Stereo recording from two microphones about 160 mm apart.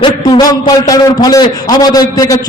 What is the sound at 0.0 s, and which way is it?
A man's voice, 30° left (ahead or behind).